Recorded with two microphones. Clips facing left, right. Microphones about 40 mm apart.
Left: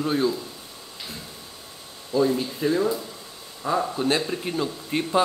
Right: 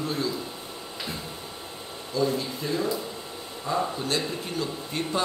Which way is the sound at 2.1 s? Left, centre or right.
Left.